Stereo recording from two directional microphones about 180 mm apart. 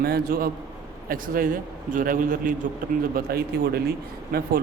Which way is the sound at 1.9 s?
50° right (ahead or behind).